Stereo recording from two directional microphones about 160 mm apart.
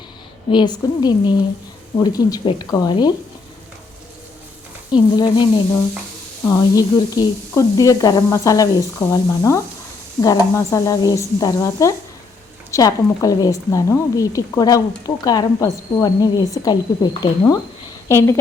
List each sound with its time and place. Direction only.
0.5 s a woman's voice: 25° left (ahead or behind)
4.9 s a woman's voice: 30° left (ahead or behind)